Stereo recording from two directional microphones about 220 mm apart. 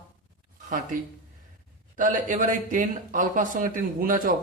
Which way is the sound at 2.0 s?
35° right (ahead or behind).